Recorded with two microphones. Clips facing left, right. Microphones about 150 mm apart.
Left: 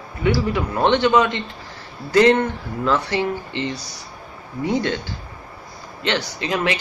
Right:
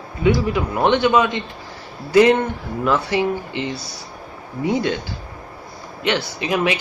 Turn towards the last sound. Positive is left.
turn(degrees=-15)  # may be behind; listen again after turning